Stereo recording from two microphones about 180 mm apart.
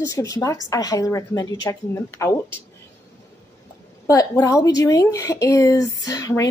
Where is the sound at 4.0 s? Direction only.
20° left (ahead or behind).